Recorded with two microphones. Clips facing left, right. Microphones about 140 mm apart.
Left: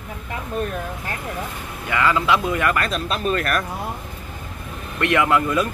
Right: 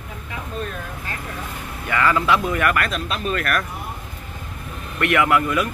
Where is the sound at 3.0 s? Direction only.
35° left (ahead or behind).